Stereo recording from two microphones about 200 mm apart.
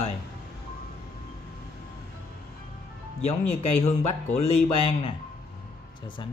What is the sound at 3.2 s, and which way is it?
A man's voice, 30° left (ahead or behind).